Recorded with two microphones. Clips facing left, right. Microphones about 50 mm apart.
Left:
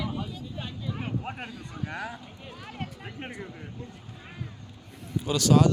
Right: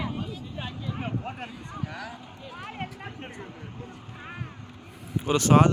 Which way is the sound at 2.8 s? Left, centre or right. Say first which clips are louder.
Right 1 dB; right.